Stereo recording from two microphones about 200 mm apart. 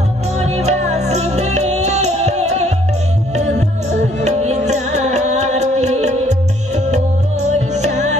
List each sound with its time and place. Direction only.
0.4 s music: 35° right (ahead or behind)
4.2 s music: 35° right (ahead or behind)